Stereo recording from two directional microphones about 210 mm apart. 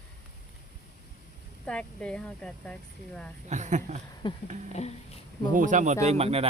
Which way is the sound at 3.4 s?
35° right (ahead or behind).